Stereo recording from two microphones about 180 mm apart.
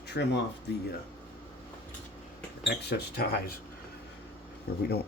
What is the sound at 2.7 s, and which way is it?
Speech, 65° left (ahead or behind).